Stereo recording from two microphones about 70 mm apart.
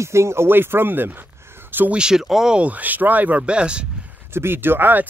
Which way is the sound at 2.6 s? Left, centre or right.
Right.